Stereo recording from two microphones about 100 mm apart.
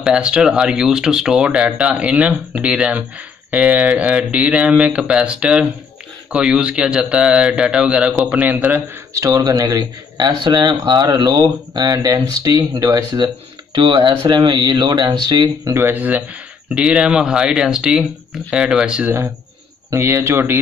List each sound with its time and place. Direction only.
0.0 s speech: 10° right (ahead or behind)
9.1 s speech: 35° right (ahead or behind)
15.7 s speech: 20° right (ahead or behind)
19.9 s speech: 25° right (ahead or behind)